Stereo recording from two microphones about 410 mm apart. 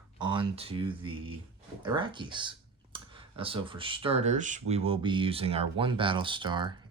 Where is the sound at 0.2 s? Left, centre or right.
Centre.